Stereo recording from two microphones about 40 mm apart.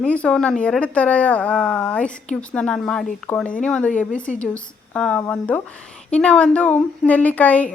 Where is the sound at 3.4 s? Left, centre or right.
Left.